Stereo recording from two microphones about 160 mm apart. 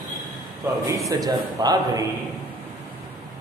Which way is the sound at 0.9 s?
20° right (ahead or behind).